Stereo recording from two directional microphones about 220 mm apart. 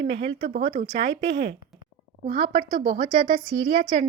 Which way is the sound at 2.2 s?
25° right (ahead or behind).